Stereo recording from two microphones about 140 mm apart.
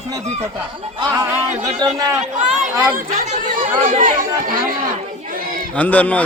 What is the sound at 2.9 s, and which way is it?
Speech, 75° right (ahead or behind).